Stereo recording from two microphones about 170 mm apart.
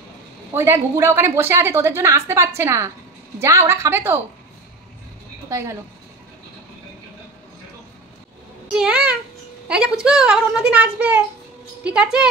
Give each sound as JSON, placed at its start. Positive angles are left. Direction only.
{"t": 0.5, "sound": "a woman's voice", "side_deg": -15}
{"t": 5.5, "sound": "a woman's voice", "side_deg": -15}
{"t": 8.7, "sound": "a child's voice", "side_deg": -5}